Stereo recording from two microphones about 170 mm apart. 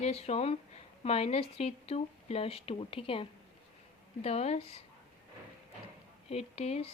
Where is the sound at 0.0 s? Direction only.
40° left (ahead or behind).